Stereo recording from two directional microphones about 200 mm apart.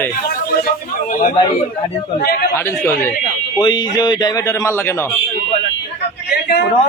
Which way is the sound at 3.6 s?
20° left (ahead or behind).